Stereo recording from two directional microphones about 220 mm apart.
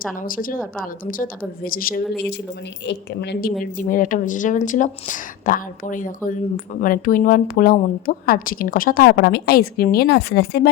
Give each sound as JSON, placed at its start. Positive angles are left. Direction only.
{"t": 0.2, "sound": "a woman's voice", "side_deg": 40}
{"t": 2.8, "sound": "a woman's voice", "side_deg": 50}
{"t": 3.6, "sound": "a woman's voice", "side_deg": 40}